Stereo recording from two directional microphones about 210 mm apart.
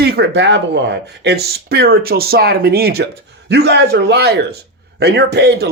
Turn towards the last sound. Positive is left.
turn(degrees=-50)  # may be behind; listen again after turning